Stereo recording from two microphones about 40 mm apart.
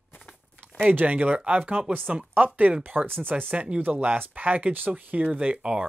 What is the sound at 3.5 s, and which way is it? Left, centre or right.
Speech, right.